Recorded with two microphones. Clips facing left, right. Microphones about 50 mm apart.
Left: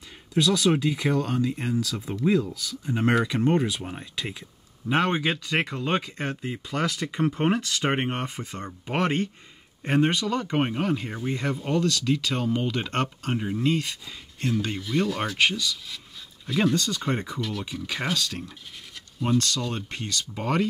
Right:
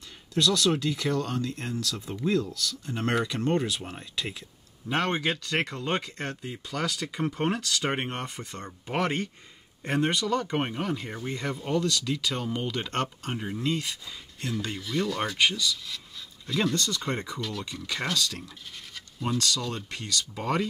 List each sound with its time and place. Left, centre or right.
0.3 s speech: centre
6.7 s speech: left
7.4 s speech: left
10.0 s speech: centre
12.9 s speech: centre
17.4 s speech: centre